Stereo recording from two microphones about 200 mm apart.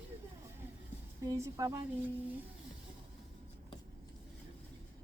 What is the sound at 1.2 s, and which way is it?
Speech, 15° right (ahead or behind).